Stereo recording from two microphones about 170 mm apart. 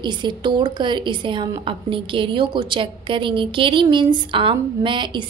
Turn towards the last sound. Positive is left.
turn(degrees=-30)  # may be behind; listen again after turning